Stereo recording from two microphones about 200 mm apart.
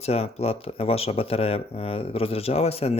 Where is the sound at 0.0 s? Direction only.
30° left (ahead or behind).